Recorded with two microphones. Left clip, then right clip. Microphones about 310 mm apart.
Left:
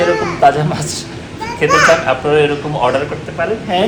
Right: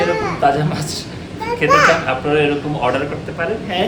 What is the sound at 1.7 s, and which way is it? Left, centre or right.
Speech, centre.